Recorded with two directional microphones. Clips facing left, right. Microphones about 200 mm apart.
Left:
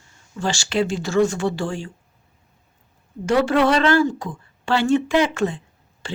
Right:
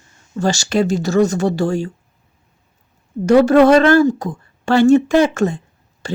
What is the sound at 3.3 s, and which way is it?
Speech, 40° right (ahead or behind).